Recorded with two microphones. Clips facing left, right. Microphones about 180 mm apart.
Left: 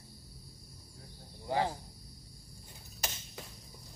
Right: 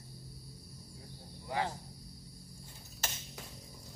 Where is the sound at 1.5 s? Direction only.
30° left (ahead or behind).